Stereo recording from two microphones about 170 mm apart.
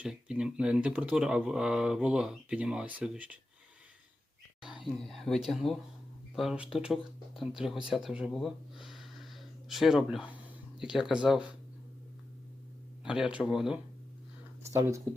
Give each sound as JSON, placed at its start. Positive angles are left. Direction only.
{"t": 0.0, "sound": "speech", "side_deg": -5}
{"t": 4.6, "sound": "speech", "side_deg": 0}
{"t": 13.1, "sound": "speech", "side_deg": -5}
{"t": 14.7, "sound": "speech", "side_deg": -15}